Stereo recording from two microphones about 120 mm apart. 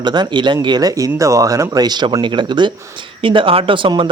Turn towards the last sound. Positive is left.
turn(degrees=-45)  # may be behind; listen again after turning